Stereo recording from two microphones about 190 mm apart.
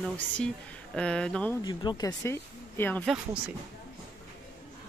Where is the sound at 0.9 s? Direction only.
5° left (ahead or behind).